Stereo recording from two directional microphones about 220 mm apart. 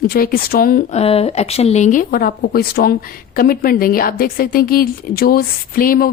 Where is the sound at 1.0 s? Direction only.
25° left (ahead or behind).